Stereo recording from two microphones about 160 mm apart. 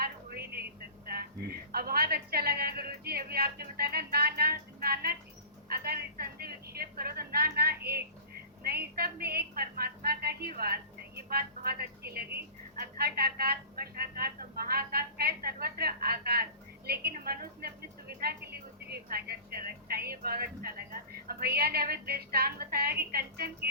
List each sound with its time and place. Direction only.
0.0 s a sound: 75° right (ahead or behind)
8.6 s a woman's voice: 75° right (ahead or behind)
19.1 s a woman's voice: 70° right (ahead or behind)